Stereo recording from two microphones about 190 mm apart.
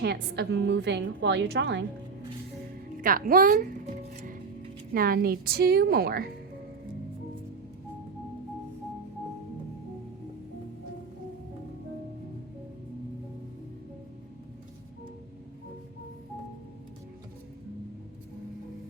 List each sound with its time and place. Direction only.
0.0 s a woman's voice: 60° right (ahead or behind)
3.0 s a woman's voice: 50° right (ahead or behind)
4.9 s a woman's voice: 50° right (ahead or behind)